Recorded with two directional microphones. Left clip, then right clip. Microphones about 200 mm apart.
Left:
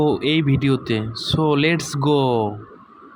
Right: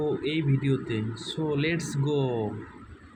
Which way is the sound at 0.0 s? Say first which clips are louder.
Left 9 dB; 40° left (ahead or behind).